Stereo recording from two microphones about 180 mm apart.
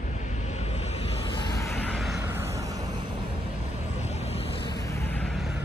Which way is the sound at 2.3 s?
15° right (ahead or behind).